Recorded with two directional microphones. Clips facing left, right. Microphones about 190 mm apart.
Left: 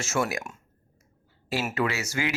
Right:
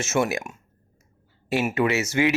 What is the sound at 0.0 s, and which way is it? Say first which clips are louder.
Speech: right 4 dB; 20° right (ahead or behind).